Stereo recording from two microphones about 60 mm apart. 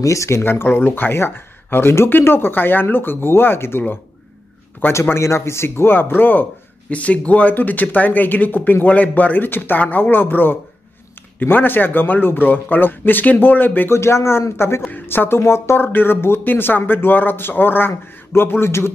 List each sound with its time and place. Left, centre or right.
0.0 s speech: left
0.4 s speech: left
5.1 s speech: left
6.9 s speech: left
13.9 s speech: left